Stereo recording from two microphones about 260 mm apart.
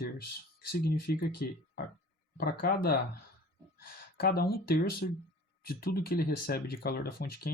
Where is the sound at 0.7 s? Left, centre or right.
Left.